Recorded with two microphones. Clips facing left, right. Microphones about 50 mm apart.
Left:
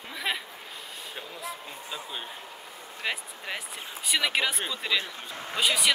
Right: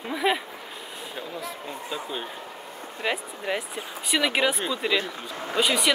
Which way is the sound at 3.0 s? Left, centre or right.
Centre.